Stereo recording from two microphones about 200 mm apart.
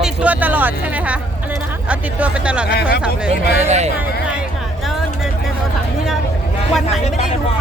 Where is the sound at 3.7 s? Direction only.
35° right (ahead or behind).